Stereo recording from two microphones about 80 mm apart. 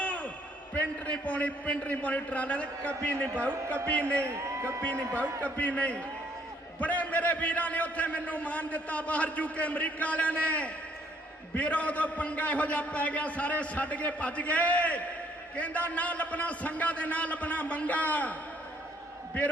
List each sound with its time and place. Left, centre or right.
0.0 s a sound: centre
0.7 s a man's voice: centre
4.3 s a man's voice: right
4.8 s a man's voice: centre